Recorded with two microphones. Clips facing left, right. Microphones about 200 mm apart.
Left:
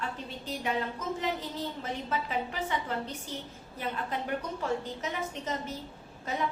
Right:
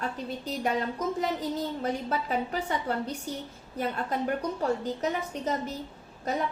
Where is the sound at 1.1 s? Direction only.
40° right (ahead or behind).